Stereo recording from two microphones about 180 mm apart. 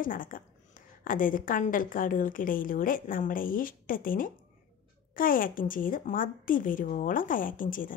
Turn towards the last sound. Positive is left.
turn(degrees=50)  # may be behind; listen again after turning